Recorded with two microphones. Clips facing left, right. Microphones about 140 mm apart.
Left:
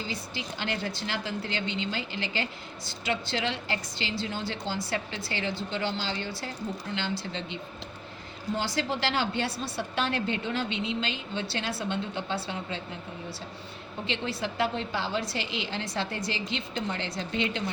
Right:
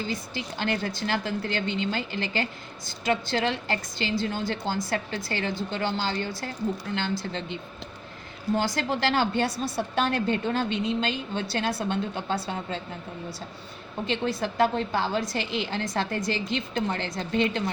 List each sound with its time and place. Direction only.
0.0 s a woman's voice: 50° right (ahead or behind)
14.1 s a woman's voice: 45° right (ahead or behind)